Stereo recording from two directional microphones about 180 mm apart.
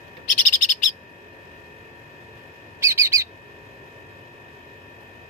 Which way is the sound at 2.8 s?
15° right (ahead or behind).